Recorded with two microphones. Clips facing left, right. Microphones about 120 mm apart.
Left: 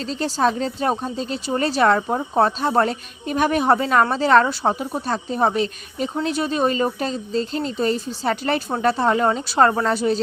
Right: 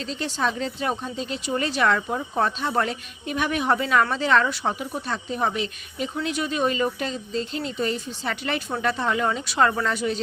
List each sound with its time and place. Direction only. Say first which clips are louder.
0.0 s speech: left 6 dB; 35° left (ahead or behind)